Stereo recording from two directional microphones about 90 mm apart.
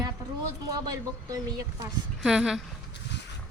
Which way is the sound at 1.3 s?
45° right (ahead or behind).